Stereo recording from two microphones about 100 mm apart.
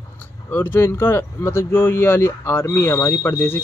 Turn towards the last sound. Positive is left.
turn(degrees=25)  # may be behind; listen again after turning